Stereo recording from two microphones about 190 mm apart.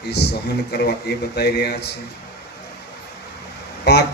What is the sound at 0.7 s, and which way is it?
Speech, 60° left (ahead or behind).